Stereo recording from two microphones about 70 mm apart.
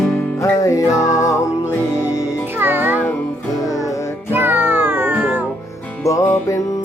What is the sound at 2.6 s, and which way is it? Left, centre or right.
Music, right.